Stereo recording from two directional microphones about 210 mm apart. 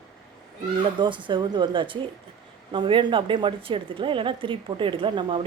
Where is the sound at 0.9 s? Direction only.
25° right (ahead or behind).